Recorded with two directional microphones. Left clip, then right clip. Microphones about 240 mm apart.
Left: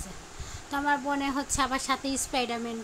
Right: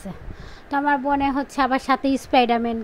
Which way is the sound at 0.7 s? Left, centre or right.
Right.